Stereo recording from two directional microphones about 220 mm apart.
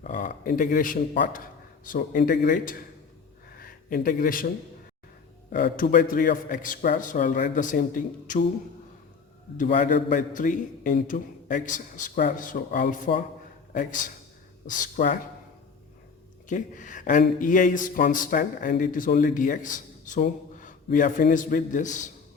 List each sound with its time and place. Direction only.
0.0 s speech: 40° left (ahead or behind)
9.6 s speech: 40° left (ahead or behind)
16.5 s speech: 35° left (ahead or behind)